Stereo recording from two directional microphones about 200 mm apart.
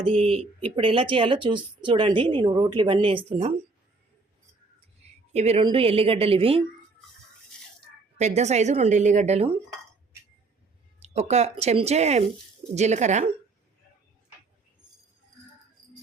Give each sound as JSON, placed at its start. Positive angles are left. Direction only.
{"t": 0.2, "sound": "speech", "side_deg": -30}
{"t": 5.3, "sound": "speech", "side_deg": -30}
{"t": 8.2, "sound": "speech", "side_deg": -35}
{"t": 11.0, "sound": "speech", "side_deg": -35}